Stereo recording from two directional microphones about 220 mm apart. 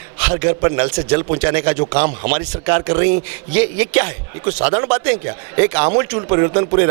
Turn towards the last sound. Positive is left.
turn(degrees=-15)  # may be behind; listen again after turning